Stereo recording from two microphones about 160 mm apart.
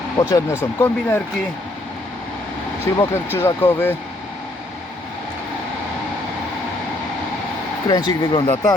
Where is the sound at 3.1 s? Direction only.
15° left (ahead or behind).